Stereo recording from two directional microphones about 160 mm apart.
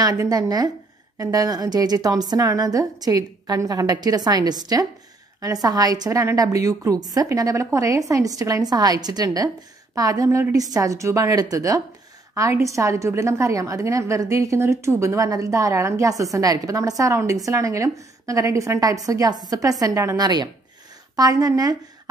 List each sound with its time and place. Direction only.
0.0 s a woman's voice: 20° right (ahead or behind)